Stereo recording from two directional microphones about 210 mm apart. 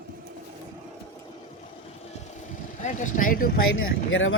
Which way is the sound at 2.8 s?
35° left (ahead or behind).